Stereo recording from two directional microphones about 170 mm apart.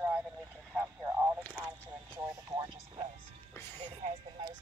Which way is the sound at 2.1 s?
25° right (ahead or behind).